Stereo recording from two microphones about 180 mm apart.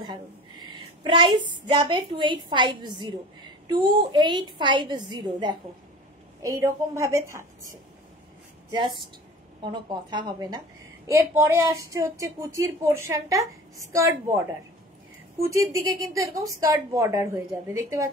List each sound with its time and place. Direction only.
0.0 s a woman's voice: 25° right (ahead or behind)
9.7 s a woman's voice: 25° right (ahead or behind)
15.4 s speech: 15° right (ahead or behind)